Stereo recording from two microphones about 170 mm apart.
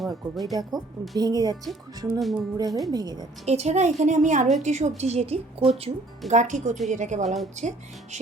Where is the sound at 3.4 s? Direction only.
40° right (ahead or behind).